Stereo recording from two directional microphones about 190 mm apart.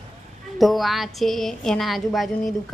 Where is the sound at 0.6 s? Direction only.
Centre (ahead or behind).